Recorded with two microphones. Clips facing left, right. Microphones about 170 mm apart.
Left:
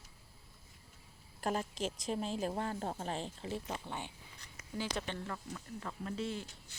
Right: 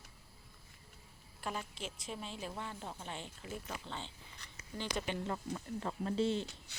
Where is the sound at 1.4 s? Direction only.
40° left (ahead or behind).